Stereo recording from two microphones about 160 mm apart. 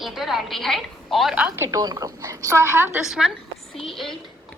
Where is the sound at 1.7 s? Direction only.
20° right (ahead or behind).